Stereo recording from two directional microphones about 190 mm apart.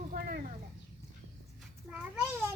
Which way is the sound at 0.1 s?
50° right (ahead or behind).